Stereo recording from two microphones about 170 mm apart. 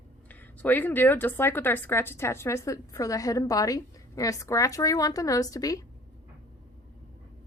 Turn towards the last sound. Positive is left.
turn(degrees=20)  # may be behind; listen again after turning